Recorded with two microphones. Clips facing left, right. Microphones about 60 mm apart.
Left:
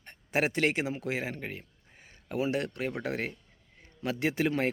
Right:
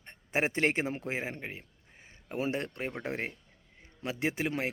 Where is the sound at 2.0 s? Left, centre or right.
Right.